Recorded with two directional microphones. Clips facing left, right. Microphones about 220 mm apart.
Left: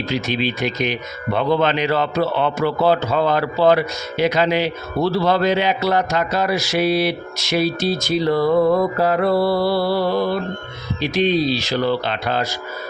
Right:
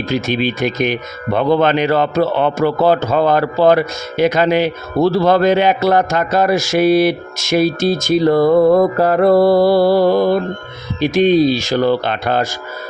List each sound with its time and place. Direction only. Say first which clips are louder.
0.0 s speech: right 4 dB; 50° right (ahead or behind)